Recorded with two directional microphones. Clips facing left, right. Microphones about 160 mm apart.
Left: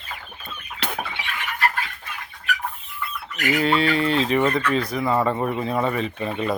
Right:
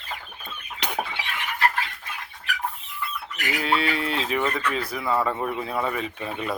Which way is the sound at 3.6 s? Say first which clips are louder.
Left 4 dB; centre (ahead or behind).